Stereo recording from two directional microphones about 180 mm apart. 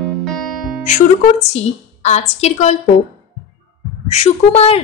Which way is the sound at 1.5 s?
40° left (ahead or behind).